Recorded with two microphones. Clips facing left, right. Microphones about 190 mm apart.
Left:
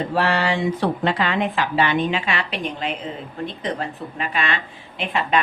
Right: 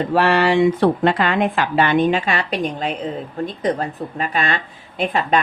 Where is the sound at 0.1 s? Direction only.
60° right (ahead or behind).